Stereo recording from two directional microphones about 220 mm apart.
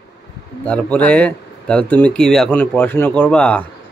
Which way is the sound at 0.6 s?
5° left (ahead or behind).